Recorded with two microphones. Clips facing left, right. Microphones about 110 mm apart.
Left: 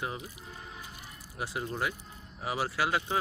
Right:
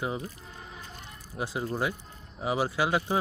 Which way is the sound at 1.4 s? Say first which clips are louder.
Right 3 dB; 25° right (ahead or behind).